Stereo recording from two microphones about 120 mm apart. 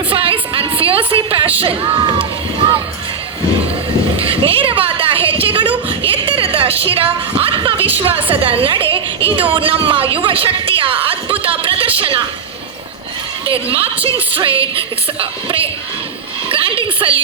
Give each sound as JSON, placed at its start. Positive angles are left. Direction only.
{"t": 0.1, "sound": "music", "side_deg": -50}
{"t": 1.6, "sound": "speech", "side_deg": -45}
{"t": 4.4, "sound": "a sound", "side_deg": -50}
{"t": 8.0, "sound": "a woman's voice", "side_deg": -50}
{"t": 10.2, "sound": "a sound", "side_deg": -50}
{"t": 11.9, "sound": "a woman's voice", "side_deg": -50}
{"t": 13.7, "sound": "a woman's voice", "side_deg": -50}